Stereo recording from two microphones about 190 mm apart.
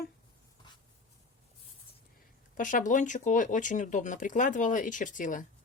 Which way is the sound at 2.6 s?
45° left (ahead or behind).